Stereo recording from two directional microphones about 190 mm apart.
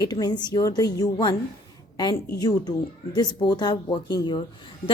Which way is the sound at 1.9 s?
20° left (ahead or behind).